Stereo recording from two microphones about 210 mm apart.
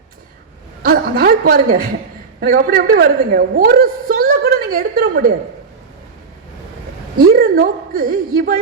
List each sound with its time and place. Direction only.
0.8 s a sound: 45° right (ahead or behind)
2.4 s a woman's voice: 45° right (ahead or behind)
7.3 s a woman's voice: 45° right (ahead or behind)